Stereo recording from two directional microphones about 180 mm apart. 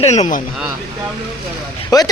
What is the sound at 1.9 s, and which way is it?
Speech, 20° left (ahead or behind).